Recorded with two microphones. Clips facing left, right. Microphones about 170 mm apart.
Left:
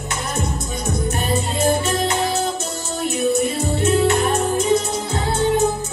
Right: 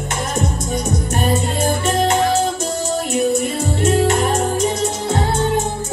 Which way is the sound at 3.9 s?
45° right (ahead or behind).